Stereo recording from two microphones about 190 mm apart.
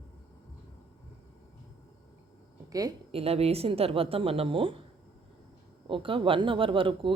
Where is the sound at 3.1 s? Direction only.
30° right (ahead or behind).